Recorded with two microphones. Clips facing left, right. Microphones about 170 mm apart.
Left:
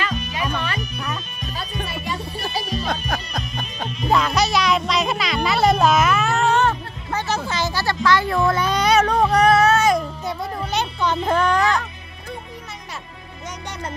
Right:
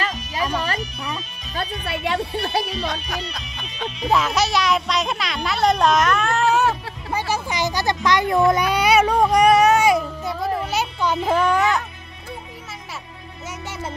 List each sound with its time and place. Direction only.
1.6 s music: 70° right (ahead or behind)
2.8 s speech: 50° left (ahead or behind)
3.3 s music: 45° left (ahead or behind)
4.1 s speech: centre (ahead or behind)